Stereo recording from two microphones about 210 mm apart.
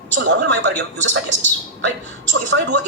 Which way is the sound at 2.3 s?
60° right (ahead or behind).